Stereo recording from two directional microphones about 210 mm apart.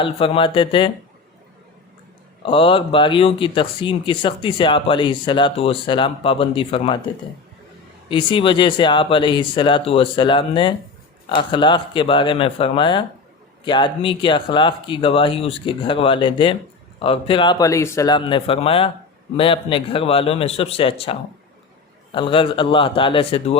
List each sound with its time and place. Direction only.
0.0 s speech: 25° left (ahead or behind)
2.4 s speech: 25° left (ahead or behind)
8.1 s speech: 25° left (ahead or behind)